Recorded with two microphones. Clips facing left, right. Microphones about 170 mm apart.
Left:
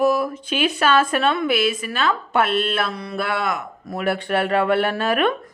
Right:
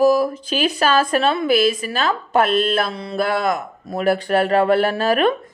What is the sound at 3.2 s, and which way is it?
Speech, 40° right (ahead or behind).